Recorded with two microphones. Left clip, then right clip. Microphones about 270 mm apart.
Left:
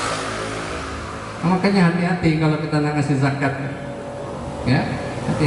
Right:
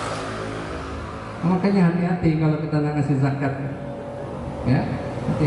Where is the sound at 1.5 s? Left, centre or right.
Centre.